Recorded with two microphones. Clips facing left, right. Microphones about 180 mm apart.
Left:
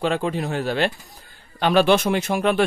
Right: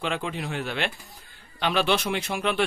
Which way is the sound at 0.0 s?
40° left (ahead or behind).